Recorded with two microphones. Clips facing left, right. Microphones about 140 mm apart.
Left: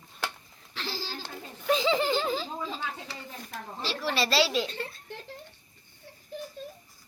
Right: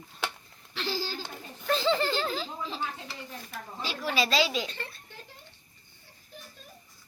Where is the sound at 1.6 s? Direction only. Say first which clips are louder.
Left 1 dB; centre (ahead or behind).